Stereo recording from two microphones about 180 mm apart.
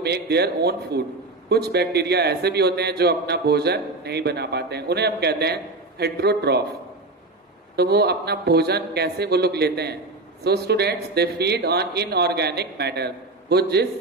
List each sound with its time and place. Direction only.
0.0 s a man's voice: 65° right (ahead or behind)
7.7 s a man's voice: 65° right (ahead or behind)